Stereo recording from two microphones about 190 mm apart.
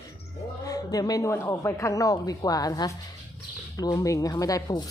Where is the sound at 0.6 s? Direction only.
20° left (ahead or behind).